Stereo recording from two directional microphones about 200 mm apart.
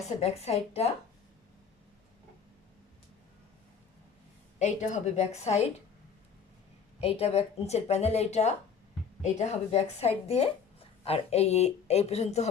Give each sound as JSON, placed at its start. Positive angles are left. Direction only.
{"t": 0.2, "sound": "speech", "side_deg": 30}
{"t": 4.6, "sound": "speech", "side_deg": 35}
{"t": 7.0, "sound": "speech", "side_deg": 30}